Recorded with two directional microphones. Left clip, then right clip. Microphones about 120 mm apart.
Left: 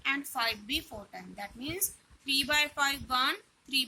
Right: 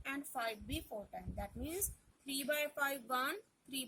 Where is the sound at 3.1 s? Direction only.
55° right (ahead or behind).